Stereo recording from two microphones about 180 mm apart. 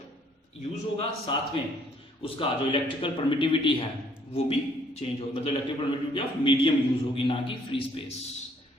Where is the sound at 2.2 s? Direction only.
30° left (ahead or behind).